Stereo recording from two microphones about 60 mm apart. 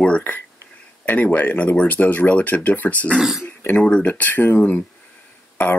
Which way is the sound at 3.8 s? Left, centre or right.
Left.